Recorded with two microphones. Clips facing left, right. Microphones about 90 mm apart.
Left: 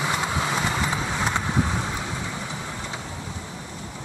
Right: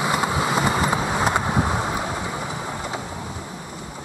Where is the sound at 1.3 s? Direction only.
45° right (ahead or behind).